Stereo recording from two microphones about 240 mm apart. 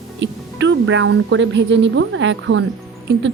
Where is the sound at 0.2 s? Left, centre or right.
Right.